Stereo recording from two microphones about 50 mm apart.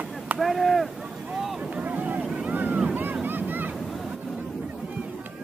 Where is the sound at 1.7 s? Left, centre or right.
Right.